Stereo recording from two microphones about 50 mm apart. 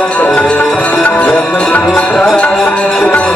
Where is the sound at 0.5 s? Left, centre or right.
Left.